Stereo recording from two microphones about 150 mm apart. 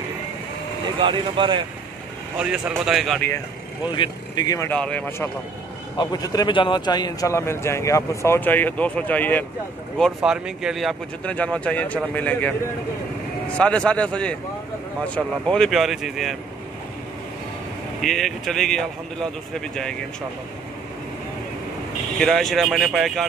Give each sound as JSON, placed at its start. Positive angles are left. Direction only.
{"t": 0.9, "sound": "speech", "side_deg": -35}
{"t": 2.3, "sound": "speech", "side_deg": -5}
{"t": 3.9, "sound": "a man's voice", "side_deg": 30}
{"t": 4.6, "sound": "speech", "side_deg": 5}
{"t": 5.9, "sound": "a man's voice", "side_deg": 25}
{"t": 9.9, "sound": "speech", "side_deg": 0}
{"t": 13.6, "sound": "speech", "side_deg": 5}
{"t": 18.0, "sound": "speech", "side_deg": 0}
{"t": 22.2, "sound": "speech", "side_deg": 0}